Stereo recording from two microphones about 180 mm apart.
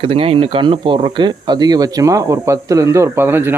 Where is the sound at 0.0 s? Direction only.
35° right (ahead or behind).